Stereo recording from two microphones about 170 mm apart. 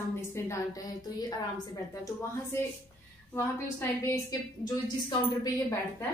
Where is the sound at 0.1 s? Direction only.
15° left (ahead or behind).